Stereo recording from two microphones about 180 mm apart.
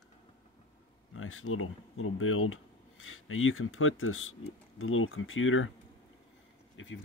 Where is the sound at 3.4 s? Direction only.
90° left.